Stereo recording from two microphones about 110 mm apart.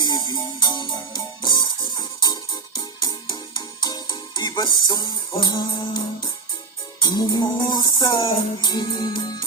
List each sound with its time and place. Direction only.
0.0 s music: 40° left (ahead or behind)